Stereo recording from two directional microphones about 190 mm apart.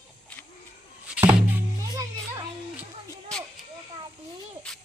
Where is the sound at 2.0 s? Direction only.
15° right (ahead or behind).